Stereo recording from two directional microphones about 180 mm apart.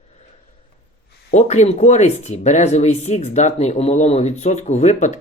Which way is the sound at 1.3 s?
40° left (ahead or behind).